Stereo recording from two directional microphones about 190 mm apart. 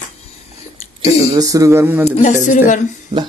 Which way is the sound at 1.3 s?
15° right (ahead or behind).